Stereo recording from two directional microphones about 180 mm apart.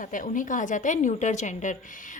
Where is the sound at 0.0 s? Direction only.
45° left (ahead or behind).